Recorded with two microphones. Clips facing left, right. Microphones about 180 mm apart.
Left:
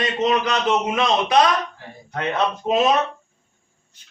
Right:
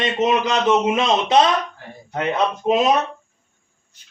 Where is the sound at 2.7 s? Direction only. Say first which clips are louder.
Right 3 dB; 15° right (ahead or behind).